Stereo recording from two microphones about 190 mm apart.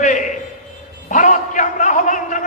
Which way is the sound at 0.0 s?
40° left (ahead or behind).